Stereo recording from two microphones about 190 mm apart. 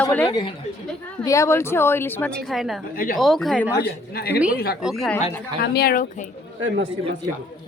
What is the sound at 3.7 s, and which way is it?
Speech, 55° left (ahead or behind).